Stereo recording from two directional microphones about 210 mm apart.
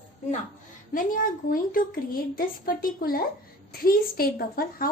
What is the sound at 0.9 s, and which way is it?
A woman's voice, 40° left (ahead or behind).